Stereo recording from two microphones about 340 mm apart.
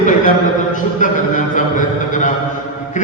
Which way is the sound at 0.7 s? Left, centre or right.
Left.